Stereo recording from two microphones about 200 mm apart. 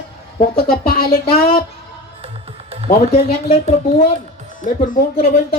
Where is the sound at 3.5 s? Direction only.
35° left (ahead or behind).